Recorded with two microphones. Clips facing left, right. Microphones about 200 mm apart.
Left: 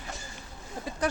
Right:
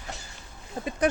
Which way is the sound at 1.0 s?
20° right (ahead or behind).